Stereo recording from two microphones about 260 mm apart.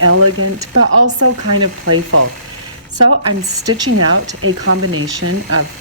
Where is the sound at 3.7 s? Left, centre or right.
Right.